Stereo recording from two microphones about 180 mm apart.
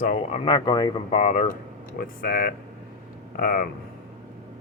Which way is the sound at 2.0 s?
55° left (ahead or behind).